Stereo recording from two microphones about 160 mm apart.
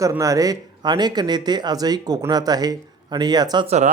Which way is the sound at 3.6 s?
45° right (ahead or behind).